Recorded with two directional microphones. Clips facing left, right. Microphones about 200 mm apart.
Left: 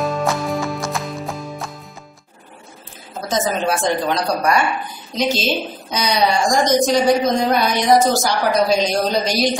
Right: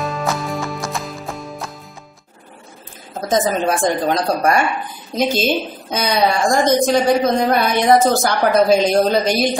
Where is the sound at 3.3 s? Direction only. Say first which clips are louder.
Right 3 dB; 50° right (ahead or behind).